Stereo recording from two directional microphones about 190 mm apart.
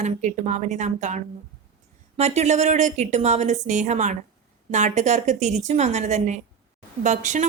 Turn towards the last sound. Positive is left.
turn(degrees=-40)  # may be behind; listen again after turning